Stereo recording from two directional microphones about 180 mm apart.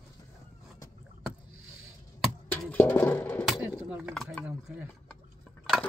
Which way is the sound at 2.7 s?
10° left (ahead or behind).